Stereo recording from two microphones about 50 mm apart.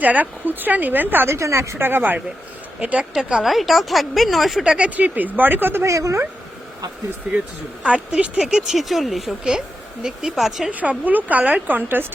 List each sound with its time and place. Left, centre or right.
0.0 s speech: right
1.3 s a woman's voice: right
1.8 s speech: right
2.8 s speech: right
3.4 s speech: centre
4.6 s a woman's voice: centre
4.9 s speech: right
5.8 s speech: right
7.9 s speech: right
8.7 s speech: centre
9.4 s a woman's voice: centre
10.7 s speech: right